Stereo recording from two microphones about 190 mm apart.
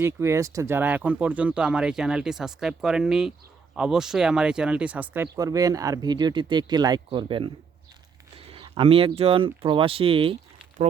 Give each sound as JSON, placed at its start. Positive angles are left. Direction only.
{"t": 0.0, "sound": "speech", "side_deg": -15}